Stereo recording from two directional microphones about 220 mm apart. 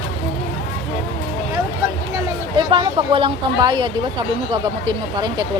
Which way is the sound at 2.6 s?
20° right (ahead or behind).